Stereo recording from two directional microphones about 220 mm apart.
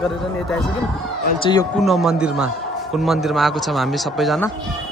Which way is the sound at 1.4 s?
20° left (ahead or behind).